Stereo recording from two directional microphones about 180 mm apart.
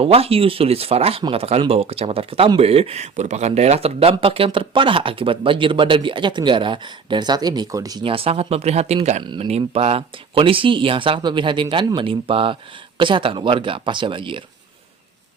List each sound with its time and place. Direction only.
0.0 s speech: 35° right (ahead or behind)